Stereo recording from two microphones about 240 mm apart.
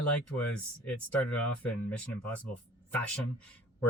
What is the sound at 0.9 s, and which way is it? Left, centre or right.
Speech, centre.